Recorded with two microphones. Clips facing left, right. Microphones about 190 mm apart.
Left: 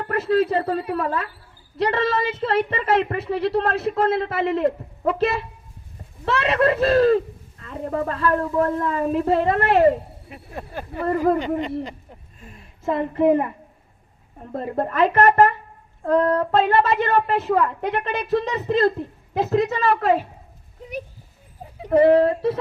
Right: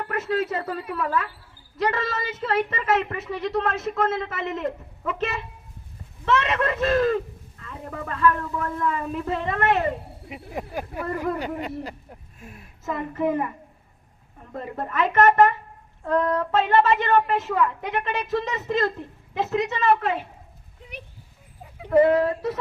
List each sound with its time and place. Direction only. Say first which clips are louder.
0.0 s a woman's voice: left 6 dB; 35° left (ahead or behind)
10.2 s speech: right 2 dB; 15° right (ahead or behind)
12.8 s a woman's voice: left 6 dB; 30° left (ahead or behind)
14.5 s a woman's voice: left 5 dB; 35° left (ahead or behind)
21.9 s speech: left 3 dB; 30° left (ahead or behind)